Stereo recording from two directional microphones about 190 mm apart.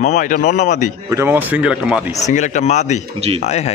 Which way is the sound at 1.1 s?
10° right (ahead or behind).